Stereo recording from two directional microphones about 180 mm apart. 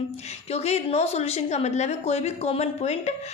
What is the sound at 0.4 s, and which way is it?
Speech, 35° left (ahead or behind).